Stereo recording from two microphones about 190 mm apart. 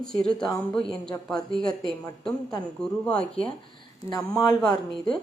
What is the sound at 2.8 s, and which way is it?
Speech, 5° left (ahead or behind).